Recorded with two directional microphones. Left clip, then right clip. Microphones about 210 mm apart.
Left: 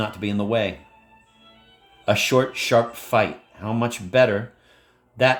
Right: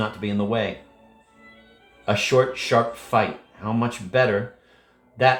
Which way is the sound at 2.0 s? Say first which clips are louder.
Even; 55° left (ahead or behind).